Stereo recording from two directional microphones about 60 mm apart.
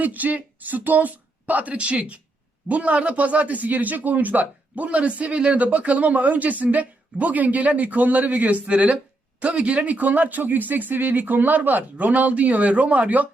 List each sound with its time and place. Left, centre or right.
0.0 s a man's voice: right